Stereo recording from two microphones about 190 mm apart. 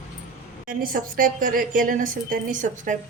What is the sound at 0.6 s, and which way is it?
A woman's voice, 45° right (ahead or behind).